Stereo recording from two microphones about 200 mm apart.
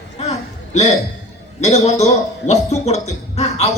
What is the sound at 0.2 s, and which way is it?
Hiccup, 30° left (ahead or behind).